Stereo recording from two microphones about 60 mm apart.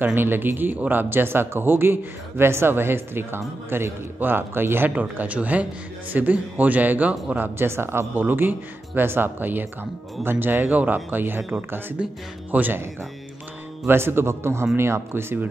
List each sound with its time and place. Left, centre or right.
0.0 s speech: right
4.9 s speech: right
12.4 s speech: right
13.8 s a man's voice: right